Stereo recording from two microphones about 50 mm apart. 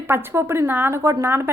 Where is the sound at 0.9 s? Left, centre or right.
Right.